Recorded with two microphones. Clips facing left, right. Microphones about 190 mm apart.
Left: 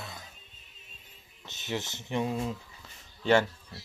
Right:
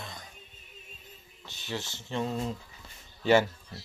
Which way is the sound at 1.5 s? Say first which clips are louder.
Left 2 dB; 20° left (ahead or behind).